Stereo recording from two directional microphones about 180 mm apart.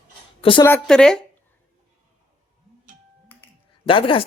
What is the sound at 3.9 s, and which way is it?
Speech, 30° left (ahead or behind).